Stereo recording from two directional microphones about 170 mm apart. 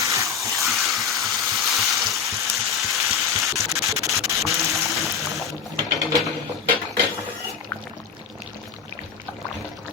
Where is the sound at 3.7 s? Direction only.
Centre (ahead or behind).